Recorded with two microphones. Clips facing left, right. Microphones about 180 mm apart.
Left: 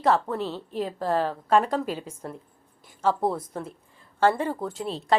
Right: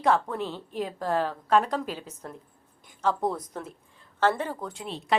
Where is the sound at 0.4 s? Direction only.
40° left (ahead or behind).